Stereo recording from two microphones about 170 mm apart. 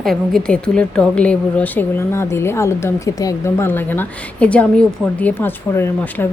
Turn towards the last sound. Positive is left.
turn(degrees=15)  # may be behind; listen again after turning